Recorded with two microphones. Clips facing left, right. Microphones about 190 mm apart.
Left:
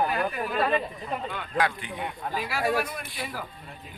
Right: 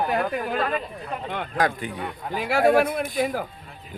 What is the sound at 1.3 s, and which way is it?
Speech, 50° right (ahead or behind).